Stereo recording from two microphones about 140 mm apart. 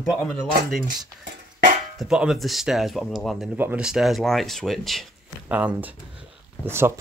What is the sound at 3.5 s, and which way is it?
Speech, 10° right (ahead or behind).